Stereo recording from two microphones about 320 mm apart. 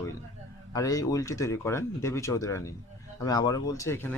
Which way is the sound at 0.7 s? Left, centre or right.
Centre.